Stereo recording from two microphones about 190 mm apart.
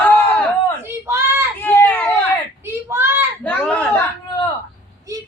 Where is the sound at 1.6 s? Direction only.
10° left (ahead or behind).